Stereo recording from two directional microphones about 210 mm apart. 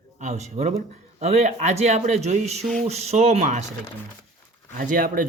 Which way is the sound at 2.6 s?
Centre (ahead or behind).